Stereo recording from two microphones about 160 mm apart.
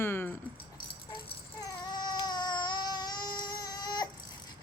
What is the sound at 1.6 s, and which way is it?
Baby cry, 25° left (ahead or behind).